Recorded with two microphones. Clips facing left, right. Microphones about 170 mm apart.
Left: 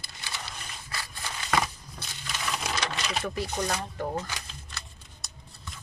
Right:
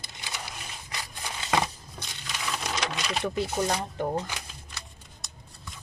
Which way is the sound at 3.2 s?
20° right (ahead or behind).